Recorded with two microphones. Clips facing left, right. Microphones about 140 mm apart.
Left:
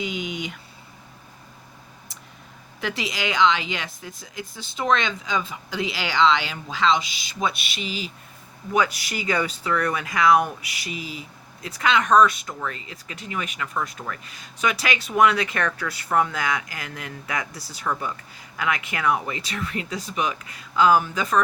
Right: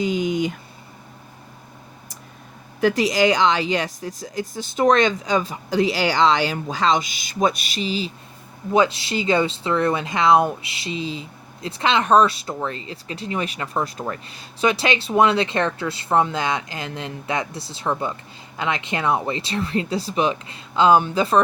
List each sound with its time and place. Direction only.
0.0 s speech: 40° right (ahead or behind)
2.8 s speech: 45° right (ahead or behind)